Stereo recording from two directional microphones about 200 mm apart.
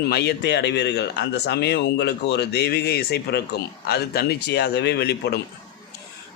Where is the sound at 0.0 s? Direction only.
55° left (ahead or behind).